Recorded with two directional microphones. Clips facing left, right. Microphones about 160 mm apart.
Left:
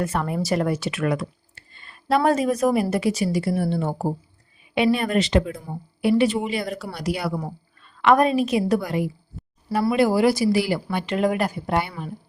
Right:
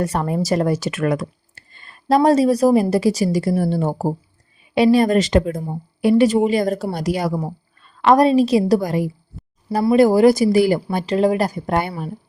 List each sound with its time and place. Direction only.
0.0 s a woman's voice: 35° right (ahead or behind)
10.8 s a woman's voice: 35° right (ahead or behind)